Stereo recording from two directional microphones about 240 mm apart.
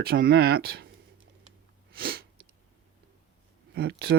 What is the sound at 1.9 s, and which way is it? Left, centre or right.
Sneeze, right.